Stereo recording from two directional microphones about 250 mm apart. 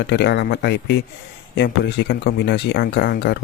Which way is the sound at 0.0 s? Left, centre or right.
Left.